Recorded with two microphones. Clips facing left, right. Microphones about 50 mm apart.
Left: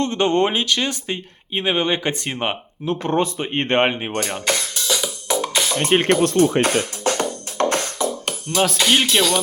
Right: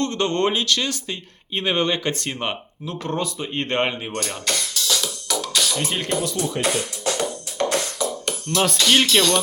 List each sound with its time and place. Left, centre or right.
0.0 s speech: left
1.5 s speech: centre
2.8 s rub: left
8.8 s music: centre